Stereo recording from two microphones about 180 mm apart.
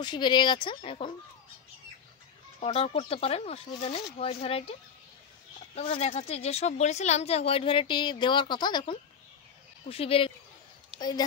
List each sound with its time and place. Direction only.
0.0 s speech: 25° left (ahead or behind)
2.6 s speech: 30° left (ahead or behind)
5.8 s speech: 35° left (ahead or behind)